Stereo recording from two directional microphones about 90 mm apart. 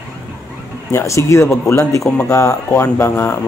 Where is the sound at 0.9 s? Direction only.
30° left (ahead or behind).